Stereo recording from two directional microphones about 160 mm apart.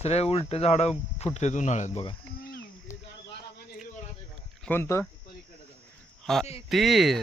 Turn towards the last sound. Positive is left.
turn(degrees=0)  # may be behind; listen again after turning